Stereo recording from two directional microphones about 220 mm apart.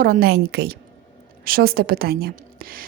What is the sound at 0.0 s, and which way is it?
A woman's voice, 40° right (ahead or behind).